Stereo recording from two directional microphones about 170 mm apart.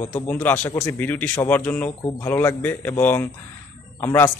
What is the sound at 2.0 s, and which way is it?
Speech, 25° left (ahead or behind).